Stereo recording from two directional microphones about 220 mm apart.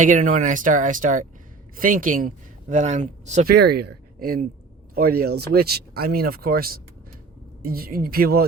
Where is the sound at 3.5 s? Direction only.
45° right (ahead or behind).